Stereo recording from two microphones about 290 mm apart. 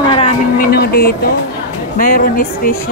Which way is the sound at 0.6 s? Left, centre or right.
Left.